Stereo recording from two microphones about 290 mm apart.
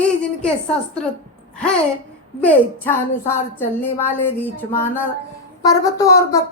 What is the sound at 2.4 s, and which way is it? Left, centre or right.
Speech, centre.